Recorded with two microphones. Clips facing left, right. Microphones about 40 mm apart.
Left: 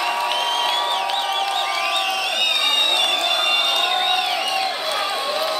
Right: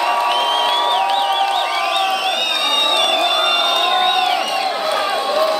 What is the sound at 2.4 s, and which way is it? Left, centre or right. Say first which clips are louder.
Crowd: right 2 dB; centre.